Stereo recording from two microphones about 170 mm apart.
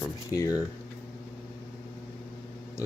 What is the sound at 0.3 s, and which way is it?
Speech, 20° left (ahead or behind).